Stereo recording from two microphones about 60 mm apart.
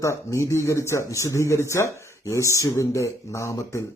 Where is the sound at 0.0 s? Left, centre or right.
Left.